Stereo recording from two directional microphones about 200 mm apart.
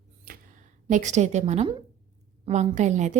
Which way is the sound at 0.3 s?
45° right (ahead or behind).